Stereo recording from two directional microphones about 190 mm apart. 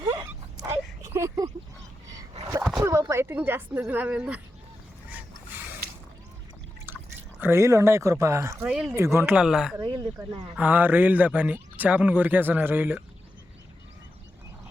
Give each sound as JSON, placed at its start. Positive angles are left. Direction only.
{"t": 0.0, "sound": "a sound", "side_deg": -20}
{"t": 2.8, "sound": "speech", "side_deg": -15}
{"t": 7.3, "sound": "a man's voice", "side_deg": -10}
{"t": 8.7, "sound": "speech", "side_deg": 0}
{"t": 9.0, "sound": "a man's voice", "side_deg": -15}
{"t": 9.7, "sound": "a man's voice", "side_deg": -20}
{"t": 10.5, "sound": "a man's voice", "side_deg": -10}